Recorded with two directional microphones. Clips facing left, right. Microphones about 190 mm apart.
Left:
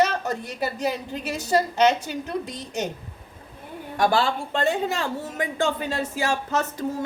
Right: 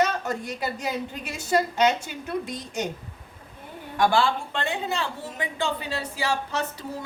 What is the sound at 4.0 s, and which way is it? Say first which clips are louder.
A woman's voice: even; 40° left (ahead or behind).